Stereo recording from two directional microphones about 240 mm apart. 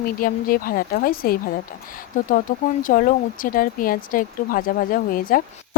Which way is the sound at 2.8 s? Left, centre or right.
Left.